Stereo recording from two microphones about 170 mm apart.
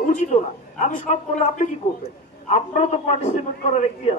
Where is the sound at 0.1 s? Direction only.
45° left (ahead or behind).